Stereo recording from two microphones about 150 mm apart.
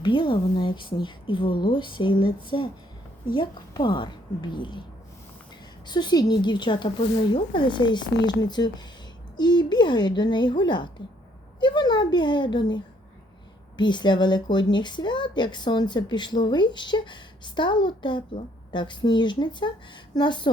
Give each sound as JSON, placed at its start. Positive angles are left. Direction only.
{"t": 0.0, "sound": "speech", "side_deg": 35}
{"t": 5.8, "sound": "speech", "side_deg": 30}